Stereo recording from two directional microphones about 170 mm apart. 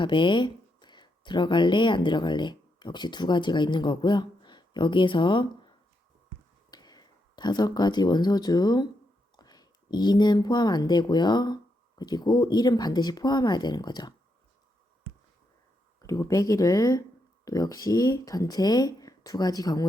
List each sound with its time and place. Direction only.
0.0 s speech: 30° left (ahead or behind)
16.0 s speech: 20° left (ahead or behind)